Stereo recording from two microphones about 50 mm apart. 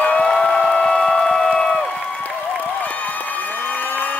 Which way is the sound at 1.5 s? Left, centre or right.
Centre.